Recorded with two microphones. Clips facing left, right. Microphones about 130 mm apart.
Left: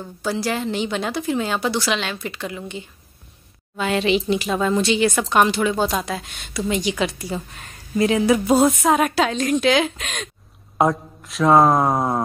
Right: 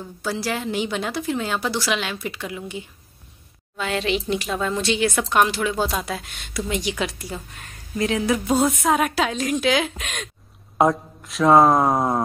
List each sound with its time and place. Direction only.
0.2 s speech: centre (ahead or behind)